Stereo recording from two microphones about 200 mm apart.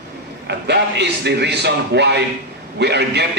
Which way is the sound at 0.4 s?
55° right (ahead or behind).